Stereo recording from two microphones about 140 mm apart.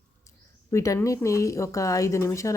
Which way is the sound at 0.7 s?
20° left (ahead or behind).